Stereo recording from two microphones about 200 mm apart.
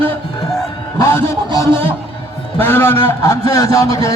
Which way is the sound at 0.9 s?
15° left (ahead or behind).